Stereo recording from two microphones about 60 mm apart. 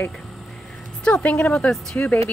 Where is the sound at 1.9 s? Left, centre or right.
Left.